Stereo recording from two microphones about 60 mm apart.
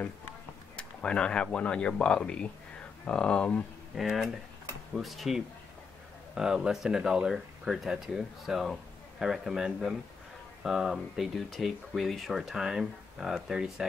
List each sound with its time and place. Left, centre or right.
0.7 s speech: centre
3.9 s speech: centre
6.3 s speech: centre